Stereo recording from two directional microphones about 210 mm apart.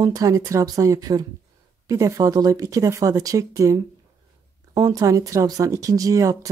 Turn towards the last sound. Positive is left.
turn(degrees=-15)  # may be behind; listen again after turning